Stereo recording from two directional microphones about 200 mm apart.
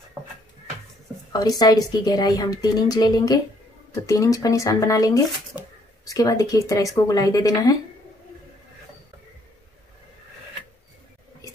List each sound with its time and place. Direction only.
1.3 s a woman's voice: 20° left (ahead or behind)